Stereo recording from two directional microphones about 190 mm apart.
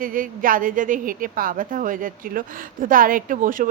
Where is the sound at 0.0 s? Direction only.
45° right (ahead or behind).